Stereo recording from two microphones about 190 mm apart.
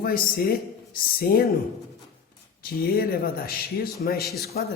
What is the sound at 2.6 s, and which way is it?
Speech, 50° left (ahead or behind).